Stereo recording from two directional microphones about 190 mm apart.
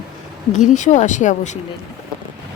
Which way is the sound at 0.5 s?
40° left (ahead or behind).